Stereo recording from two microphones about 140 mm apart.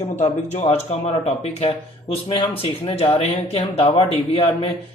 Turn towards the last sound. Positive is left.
turn(degrees=45)  # may be behind; listen again after turning